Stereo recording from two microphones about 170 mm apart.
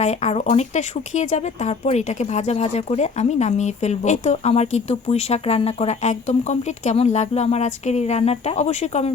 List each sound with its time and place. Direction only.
0.0 s speech: 40° left (ahead or behind)